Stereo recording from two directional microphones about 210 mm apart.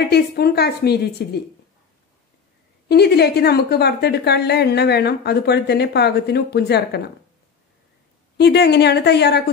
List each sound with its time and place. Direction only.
0.0 s a woman's voice: 50° left (ahead or behind)
2.9 s a woman's voice: 50° left (ahead or behind)
8.4 s a woman's voice: 50° left (ahead or behind)